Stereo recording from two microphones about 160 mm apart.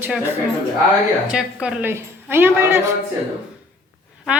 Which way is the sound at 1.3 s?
5° right (ahead or behind).